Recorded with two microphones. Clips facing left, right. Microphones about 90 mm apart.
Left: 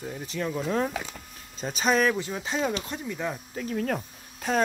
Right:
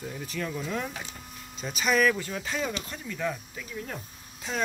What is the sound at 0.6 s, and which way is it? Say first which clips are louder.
Speech: left 6 dB; 35° left (ahead or behind).